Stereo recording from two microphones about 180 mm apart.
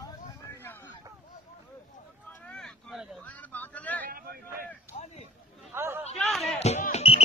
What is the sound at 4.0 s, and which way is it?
Vehicle, 55° right (ahead or behind).